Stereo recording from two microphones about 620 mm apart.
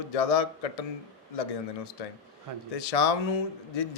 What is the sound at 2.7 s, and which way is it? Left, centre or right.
Speech, left.